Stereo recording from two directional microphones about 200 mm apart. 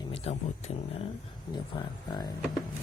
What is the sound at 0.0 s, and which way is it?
Speech, 30° left (ahead or behind).